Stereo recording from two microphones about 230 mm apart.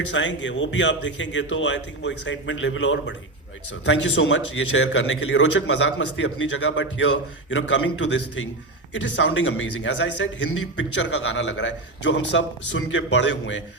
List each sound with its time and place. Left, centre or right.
0.1 s a man's voice: left